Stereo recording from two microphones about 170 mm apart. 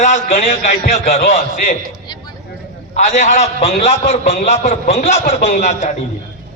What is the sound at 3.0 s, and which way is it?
A man's voice, 45° left (ahead or behind).